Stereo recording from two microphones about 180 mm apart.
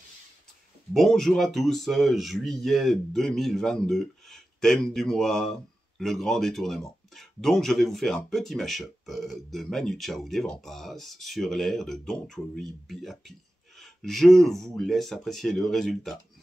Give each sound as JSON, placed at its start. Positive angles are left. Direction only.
{"t": 0.9, "sound": "speech", "side_deg": 0}